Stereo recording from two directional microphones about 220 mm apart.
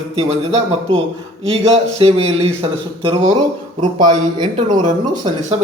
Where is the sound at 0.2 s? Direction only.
25° right (ahead or behind).